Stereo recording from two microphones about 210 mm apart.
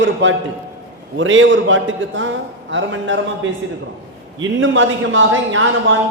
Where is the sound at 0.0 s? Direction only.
60° right (ahead or behind).